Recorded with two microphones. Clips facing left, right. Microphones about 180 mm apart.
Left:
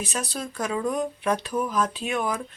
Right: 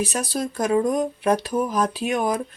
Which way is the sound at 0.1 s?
40° right (ahead or behind).